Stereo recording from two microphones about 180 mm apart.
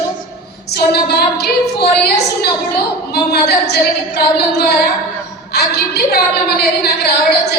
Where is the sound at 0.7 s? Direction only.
60° left (ahead or behind).